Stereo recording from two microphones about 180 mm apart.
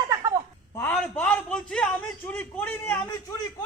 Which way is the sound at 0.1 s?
20° right (ahead or behind).